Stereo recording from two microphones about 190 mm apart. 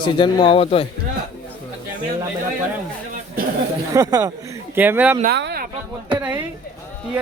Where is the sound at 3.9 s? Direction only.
20° right (ahead or behind).